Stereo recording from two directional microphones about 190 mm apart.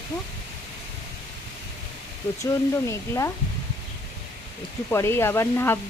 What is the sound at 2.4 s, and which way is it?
Speech, 15° left (ahead or behind).